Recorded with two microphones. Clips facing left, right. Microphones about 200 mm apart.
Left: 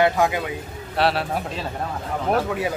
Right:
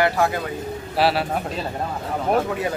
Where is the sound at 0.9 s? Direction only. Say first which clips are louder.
Right 1 dB; centre (ahead or behind).